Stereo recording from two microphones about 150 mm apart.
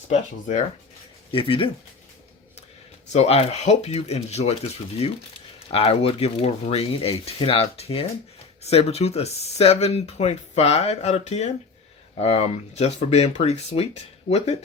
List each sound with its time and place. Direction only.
0.1 s speech: 50° left (ahead or behind)
1.3 s speech: 35° left (ahead or behind)
3.1 s speech: 45° left (ahead or behind)